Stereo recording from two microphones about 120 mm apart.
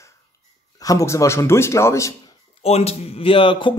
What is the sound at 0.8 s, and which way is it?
Speech, 25° left (ahead or behind).